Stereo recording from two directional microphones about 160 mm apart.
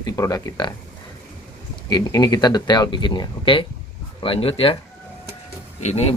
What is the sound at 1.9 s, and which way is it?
Speech, 25° left (ahead or behind).